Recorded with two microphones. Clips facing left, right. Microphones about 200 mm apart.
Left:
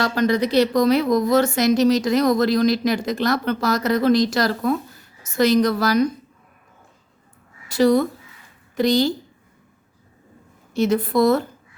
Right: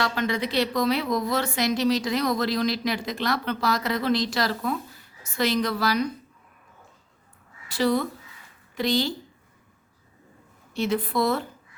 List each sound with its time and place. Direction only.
0.0 s a woman's voice: 40° left (ahead or behind)
7.7 s a woman's voice: 45° left (ahead or behind)
10.8 s a woman's voice: 45° left (ahead or behind)